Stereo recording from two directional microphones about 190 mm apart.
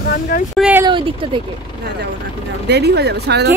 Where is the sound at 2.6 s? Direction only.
60° right (ahead or behind).